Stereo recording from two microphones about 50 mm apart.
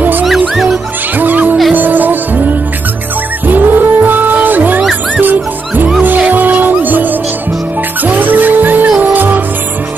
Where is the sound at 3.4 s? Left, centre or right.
Right.